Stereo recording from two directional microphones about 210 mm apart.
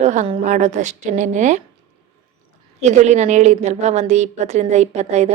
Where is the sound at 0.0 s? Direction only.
35° right (ahead or behind).